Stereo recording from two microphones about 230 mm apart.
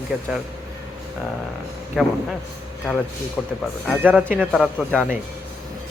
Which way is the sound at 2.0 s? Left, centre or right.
Centre.